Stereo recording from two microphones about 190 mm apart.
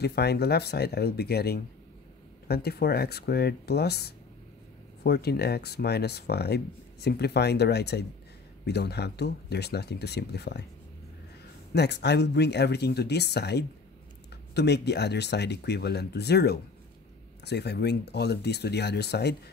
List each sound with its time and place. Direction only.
0.0 s speech: 60° left (ahead or behind)
11.7 s speech: 60° left (ahead or behind)